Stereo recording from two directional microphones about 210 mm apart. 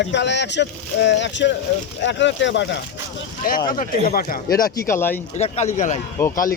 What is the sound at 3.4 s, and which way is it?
Speech, 45° left (ahead or behind).